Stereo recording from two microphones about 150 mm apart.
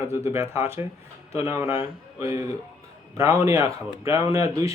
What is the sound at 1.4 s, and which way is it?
Speech, 20° right (ahead or behind).